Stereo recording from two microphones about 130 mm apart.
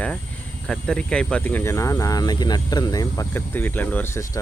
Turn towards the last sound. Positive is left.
turn(degrees=15)  # may be behind; listen again after turning